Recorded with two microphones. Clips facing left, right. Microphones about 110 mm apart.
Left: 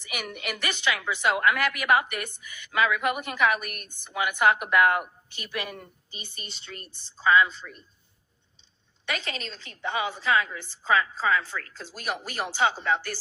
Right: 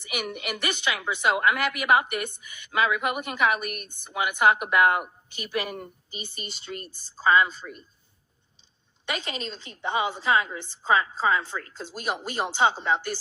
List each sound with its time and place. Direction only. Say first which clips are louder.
0.0 s a woman's voice: right 2 dB; 25° right (ahead or behind)
6.7 s a woman's voice: right 7 dB; 25° right (ahead or behind)
7.2 s a woman's voice: even; 35° right (ahead or behind)
9.0 s a woman's voice: right 1 dB; 20° right (ahead or behind)